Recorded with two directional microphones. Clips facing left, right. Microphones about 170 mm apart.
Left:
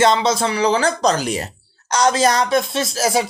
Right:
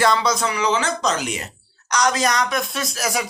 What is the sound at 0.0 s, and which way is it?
Speech, 25° left (ahead or behind).